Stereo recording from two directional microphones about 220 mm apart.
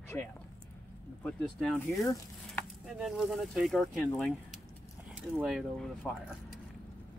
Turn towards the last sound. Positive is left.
turn(degrees=0)  # may be behind; listen again after turning